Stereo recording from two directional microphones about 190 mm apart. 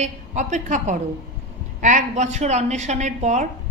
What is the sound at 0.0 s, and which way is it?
A woman's voice, 40° right (ahead or behind).